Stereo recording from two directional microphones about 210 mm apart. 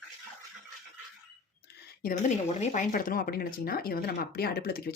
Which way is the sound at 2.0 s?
40° left (ahead or behind).